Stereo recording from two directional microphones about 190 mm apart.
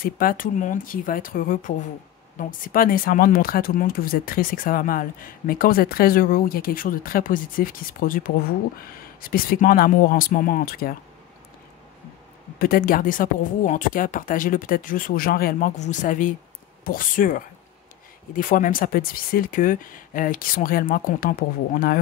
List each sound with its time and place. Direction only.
0.0 s speech: 50° left (ahead or behind)
12.5 s speech: 50° left (ahead or behind)